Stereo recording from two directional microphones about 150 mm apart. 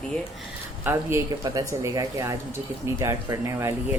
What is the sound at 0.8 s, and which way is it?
Speech, 10° right (ahead or behind).